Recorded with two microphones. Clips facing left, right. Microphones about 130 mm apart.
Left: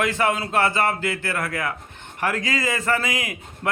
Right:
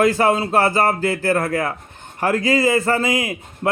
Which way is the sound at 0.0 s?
35° right (ahead or behind).